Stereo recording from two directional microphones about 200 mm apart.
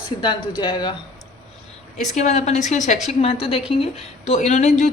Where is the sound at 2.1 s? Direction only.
35° left (ahead or behind).